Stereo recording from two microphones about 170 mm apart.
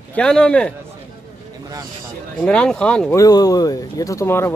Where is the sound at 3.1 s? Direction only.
20° left (ahead or behind).